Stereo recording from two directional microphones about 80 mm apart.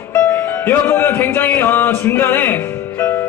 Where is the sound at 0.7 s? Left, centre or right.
Left.